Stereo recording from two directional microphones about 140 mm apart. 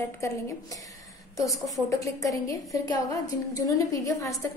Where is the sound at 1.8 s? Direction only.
25° left (ahead or behind).